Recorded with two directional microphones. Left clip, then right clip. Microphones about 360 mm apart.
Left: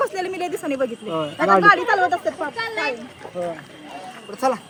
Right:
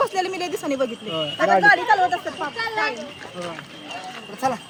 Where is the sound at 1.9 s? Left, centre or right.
Centre.